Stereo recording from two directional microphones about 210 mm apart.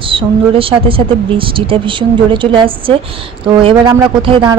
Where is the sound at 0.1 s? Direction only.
25° right (ahead or behind).